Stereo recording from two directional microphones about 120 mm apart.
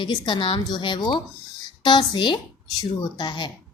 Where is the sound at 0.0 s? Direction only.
40° left (ahead or behind).